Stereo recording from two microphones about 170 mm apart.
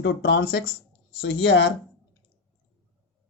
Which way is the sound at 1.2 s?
90° left.